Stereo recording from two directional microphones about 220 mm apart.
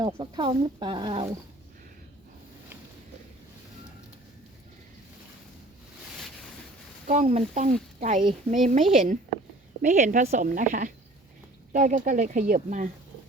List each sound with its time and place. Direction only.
0.0 s speech: 20° right (ahead or behind)
7.1 s speech: 30° right (ahead or behind)